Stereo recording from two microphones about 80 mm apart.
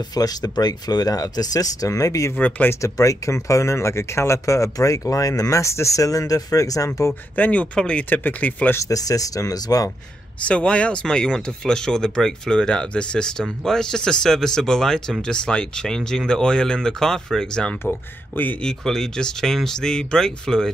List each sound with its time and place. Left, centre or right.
0.1 s speech: left
2.3 s speech: left
2.8 s speech: left
7.3 s speech: centre
8.7 s speech: left
10.4 s speech: centre
17.8 s speech: left
18.6 s speech: centre